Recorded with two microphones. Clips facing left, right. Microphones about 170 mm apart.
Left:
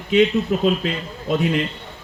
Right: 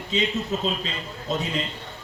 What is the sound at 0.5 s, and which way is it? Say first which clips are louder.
Speech: left 7 dB; 60° left (ahead or behind).